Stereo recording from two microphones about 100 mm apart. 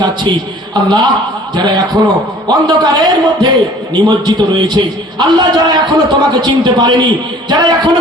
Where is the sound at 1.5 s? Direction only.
45° right (ahead or behind).